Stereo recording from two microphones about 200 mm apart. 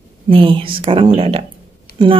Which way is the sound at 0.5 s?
25° right (ahead or behind).